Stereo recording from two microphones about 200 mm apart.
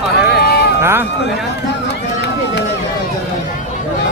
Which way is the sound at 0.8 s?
10° right (ahead or behind).